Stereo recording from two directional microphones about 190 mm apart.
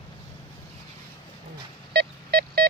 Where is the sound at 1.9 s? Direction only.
60° right (ahead or behind).